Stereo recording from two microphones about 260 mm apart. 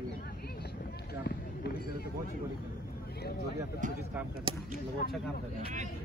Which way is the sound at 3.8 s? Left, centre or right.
Right.